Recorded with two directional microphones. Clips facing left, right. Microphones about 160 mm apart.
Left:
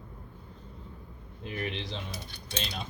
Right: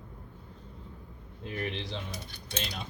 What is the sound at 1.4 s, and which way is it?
Speech, 15° left (ahead or behind).